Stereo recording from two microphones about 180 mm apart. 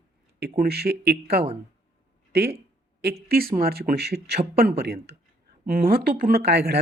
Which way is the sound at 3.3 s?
55° right (ahead or behind).